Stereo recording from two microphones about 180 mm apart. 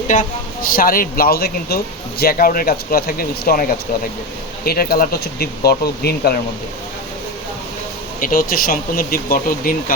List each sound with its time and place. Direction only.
0.1 s speech: 50° left (ahead or behind)
8.2 s speech: 55° left (ahead or behind)